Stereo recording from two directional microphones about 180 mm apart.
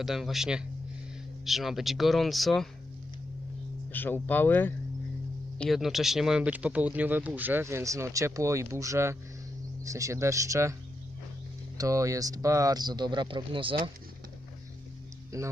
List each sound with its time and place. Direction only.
0.0 s speech: centre (ahead or behind)
3.9 s speech: 10° left (ahead or behind)
5.5 s speech: centre (ahead or behind); by 10.8 s 15° right (ahead or behind)
11.8 s speech: 20° right (ahead or behind)
15.3 s speech: 15° right (ahead or behind)